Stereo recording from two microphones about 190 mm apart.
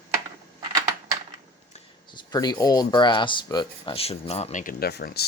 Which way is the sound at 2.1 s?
20° left (ahead or behind).